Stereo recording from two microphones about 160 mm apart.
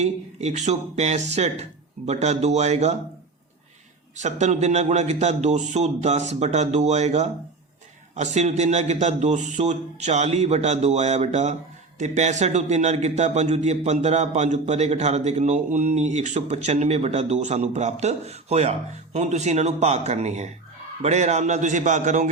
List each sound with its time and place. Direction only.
0.0 s a man's voice: 45° right (ahead or behind)
4.2 s a man's voice: 45° right (ahead or behind)